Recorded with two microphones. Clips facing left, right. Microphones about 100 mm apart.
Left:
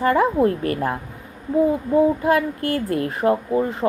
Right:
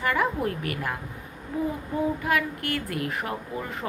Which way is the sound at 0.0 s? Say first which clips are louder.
Left 8 dB; 30° left (ahead or behind).